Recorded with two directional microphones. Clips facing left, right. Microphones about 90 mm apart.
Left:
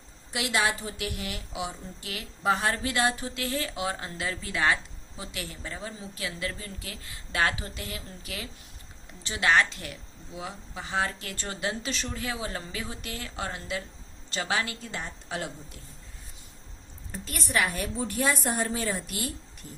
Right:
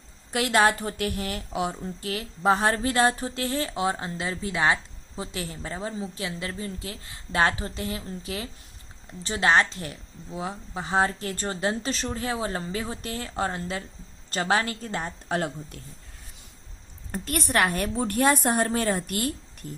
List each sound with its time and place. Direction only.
0.3 s a woman's voice: 45° right (ahead or behind)
17.1 s a woman's voice: 55° right (ahead or behind)